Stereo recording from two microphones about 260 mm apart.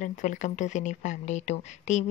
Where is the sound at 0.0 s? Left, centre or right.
Left.